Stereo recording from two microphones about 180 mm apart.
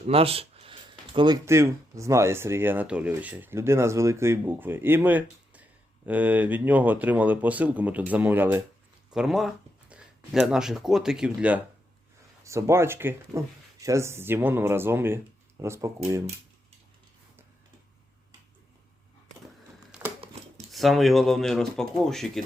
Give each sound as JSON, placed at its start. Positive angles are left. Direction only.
{"t": 0.1, "sound": "a sound", "side_deg": -30}
{"t": 1.5, "sound": "speech", "side_deg": -15}
{"t": 19.9, "sound": "crumpling", "side_deg": -5}
{"t": 20.7, "sound": "speech", "side_deg": 0}